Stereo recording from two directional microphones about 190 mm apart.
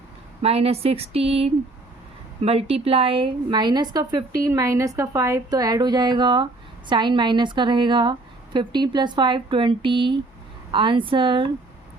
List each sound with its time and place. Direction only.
0.4 s a woman's voice: 30° right (ahead or behind)